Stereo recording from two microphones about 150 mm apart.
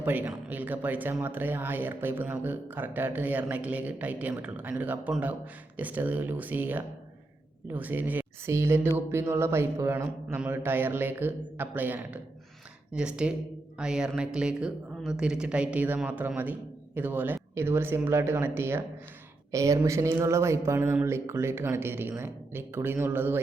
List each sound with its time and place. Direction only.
0.0 s speech: 10° right (ahead or behind)